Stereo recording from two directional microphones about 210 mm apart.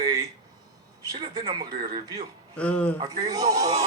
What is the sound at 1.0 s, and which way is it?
A man's voice, 20° right (ahead or behind).